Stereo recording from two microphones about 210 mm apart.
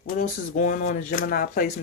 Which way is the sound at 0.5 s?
40° left (ahead or behind).